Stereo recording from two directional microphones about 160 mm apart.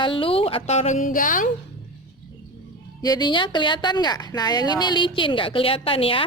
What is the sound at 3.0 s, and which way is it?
A woman's voice, 25° left (ahead or behind).